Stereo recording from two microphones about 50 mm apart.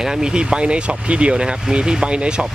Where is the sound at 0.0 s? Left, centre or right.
Centre.